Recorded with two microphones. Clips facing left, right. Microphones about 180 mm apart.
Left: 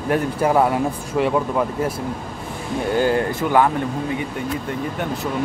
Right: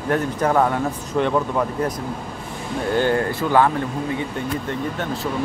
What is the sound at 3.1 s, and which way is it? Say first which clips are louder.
Speech: even; 20° left (ahead or behind).